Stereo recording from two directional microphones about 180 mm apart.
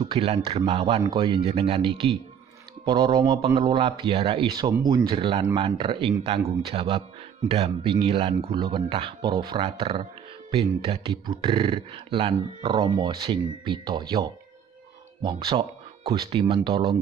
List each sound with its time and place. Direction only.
0.0 s speech: 30° right (ahead or behind)